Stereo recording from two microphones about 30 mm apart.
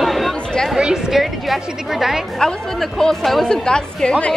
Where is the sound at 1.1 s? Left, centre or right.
Centre.